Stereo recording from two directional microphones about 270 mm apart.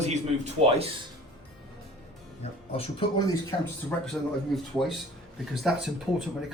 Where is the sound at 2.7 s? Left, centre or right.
Centre.